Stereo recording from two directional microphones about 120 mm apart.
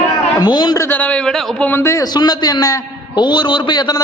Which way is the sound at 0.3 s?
35° left (ahead or behind).